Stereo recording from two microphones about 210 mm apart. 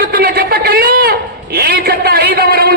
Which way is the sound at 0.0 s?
45° right (ahead or behind).